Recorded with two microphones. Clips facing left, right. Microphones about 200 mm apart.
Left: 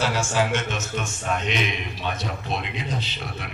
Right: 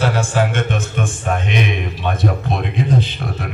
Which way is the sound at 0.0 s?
55° right (ahead or behind).